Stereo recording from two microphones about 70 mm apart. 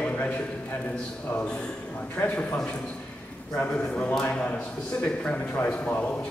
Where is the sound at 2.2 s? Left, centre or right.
Left.